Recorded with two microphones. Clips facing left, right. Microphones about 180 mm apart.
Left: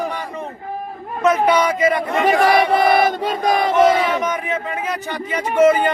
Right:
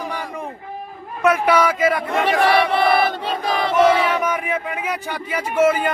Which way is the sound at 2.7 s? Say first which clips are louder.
Left 2 dB; 45° left (ahead or behind).